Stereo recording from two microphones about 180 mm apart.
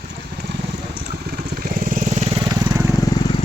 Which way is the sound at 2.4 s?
20° right (ahead or behind).